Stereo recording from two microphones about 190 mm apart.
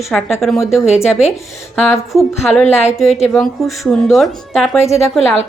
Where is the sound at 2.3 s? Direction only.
10° left (ahead or behind).